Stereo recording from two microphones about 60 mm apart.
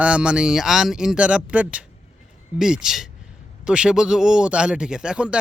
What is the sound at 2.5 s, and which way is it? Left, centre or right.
Speech, centre.